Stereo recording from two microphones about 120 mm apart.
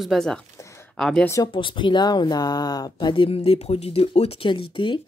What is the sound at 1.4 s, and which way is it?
Speech, 45° left (ahead or behind).